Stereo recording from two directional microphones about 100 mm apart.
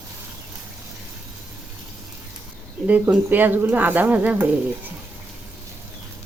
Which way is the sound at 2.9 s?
15° right (ahead or behind).